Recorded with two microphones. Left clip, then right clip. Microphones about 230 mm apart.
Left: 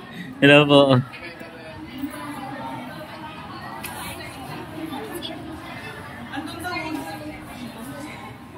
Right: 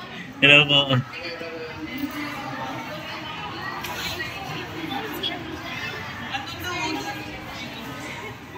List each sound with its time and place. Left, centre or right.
0.4 s speech: left